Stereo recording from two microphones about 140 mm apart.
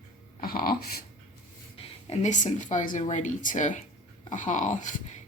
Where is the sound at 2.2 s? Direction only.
60° left (ahead or behind).